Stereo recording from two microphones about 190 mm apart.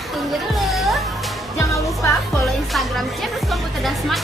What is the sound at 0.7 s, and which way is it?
Music, centre (ahead or behind).